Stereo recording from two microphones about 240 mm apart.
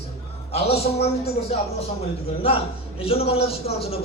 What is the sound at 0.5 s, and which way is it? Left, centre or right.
Speech, left.